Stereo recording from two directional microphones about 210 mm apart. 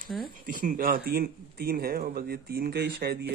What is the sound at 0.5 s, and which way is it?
A man's voice, 40° right (ahead or behind).